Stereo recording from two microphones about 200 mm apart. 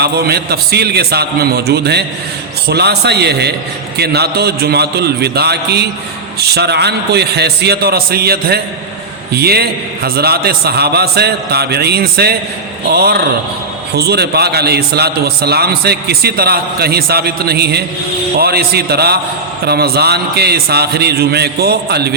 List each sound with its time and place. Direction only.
0.0 s a man's voice: 50° right (ahead or behind)